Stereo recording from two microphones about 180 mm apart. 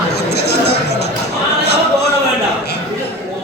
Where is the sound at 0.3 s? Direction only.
65° left (ahead or behind).